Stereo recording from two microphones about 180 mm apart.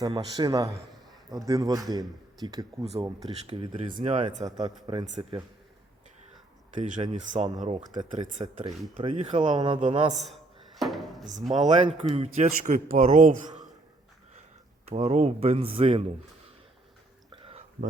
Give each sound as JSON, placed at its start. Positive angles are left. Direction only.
{"t": 0.0, "sound": "speech", "side_deg": -20}
{"t": 3.9, "sound": "speech", "side_deg": -40}
{"t": 4.9, "sound": "speech", "side_deg": -30}
{"t": 6.7, "sound": "speech", "side_deg": -45}
{"t": 8.6, "sound": "speech", "side_deg": -30}
{"t": 10.2, "sound": "music", "side_deg": 0}
{"t": 11.3, "sound": "speech", "side_deg": -40}
{"t": 14.8, "sound": "speech", "side_deg": -35}
{"t": 17.3, "sound": "whispering", "side_deg": -30}